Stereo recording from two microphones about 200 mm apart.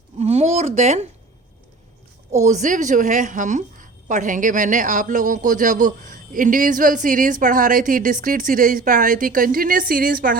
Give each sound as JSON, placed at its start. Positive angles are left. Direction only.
{"t": 0.2, "sound": "speech", "side_deg": -30}
{"t": 2.3, "sound": "a woman's voice", "side_deg": -35}